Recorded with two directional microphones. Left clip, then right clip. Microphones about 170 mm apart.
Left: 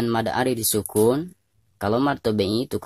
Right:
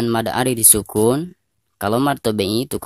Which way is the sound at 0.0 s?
25° right (ahead or behind).